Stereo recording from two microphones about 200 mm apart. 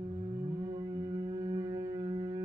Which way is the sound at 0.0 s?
30° right (ahead or behind).